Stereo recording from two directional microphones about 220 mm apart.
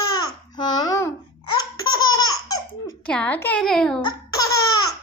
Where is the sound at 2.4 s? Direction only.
15° left (ahead or behind).